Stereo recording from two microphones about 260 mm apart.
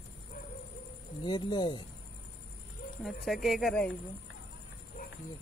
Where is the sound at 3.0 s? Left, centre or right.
Centre.